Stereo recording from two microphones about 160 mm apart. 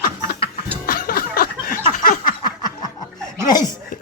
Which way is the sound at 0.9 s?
65° left (ahead or behind).